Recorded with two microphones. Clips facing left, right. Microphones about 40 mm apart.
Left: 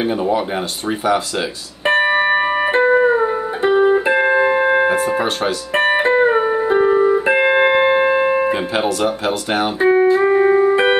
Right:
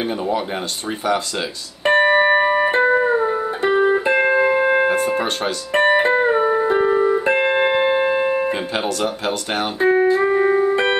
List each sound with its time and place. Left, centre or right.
0.0 s speech: centre
1.9 s music: centre
4.2 s music: left
4.8 s speech: centre
5.9 s music: centre
8.5 s music: centre